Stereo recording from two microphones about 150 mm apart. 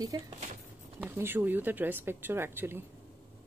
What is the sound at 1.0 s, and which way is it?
A woman's voice, 15° right (ahead or behind).